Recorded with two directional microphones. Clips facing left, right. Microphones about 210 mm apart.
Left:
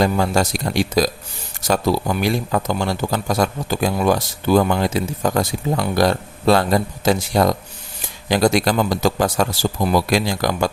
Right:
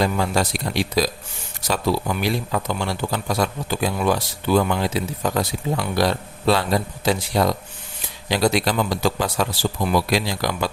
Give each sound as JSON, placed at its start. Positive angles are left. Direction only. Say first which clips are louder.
{"t": 0.0, "sound": "speech", "louder": "left 3 dB", "side_deg": 45}